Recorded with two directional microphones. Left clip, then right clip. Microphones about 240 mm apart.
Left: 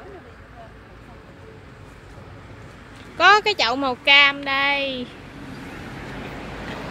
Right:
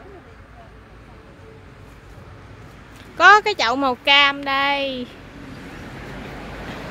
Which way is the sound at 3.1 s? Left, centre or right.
Centre.